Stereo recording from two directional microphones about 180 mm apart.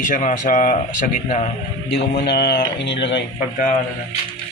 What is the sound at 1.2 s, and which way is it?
Speech, 35° left (ahead or behind).